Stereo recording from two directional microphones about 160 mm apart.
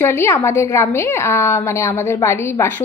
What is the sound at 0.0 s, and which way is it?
A woman's voice, 15° left (ahead or behind).